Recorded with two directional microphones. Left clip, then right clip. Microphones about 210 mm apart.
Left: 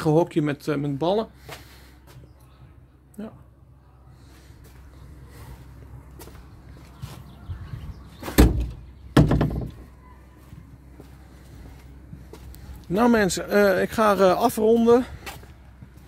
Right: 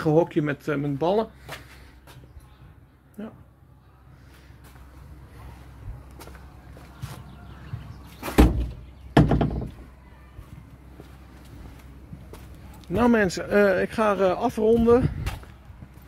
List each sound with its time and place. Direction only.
0.0 s speech: 15° left (ahead or behind)
3.2 s speech: 20° left (ahead or behind)
9.1 s door: 55° left (ahead or behind)
12.9 s speech: 20° left (ahead or behind); by 14.6 s 40° left (ahead or behind)
14.6 s speech: 25° left (ahead or behind)